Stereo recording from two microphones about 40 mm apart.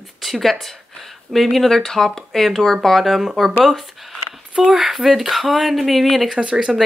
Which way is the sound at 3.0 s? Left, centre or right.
Centre.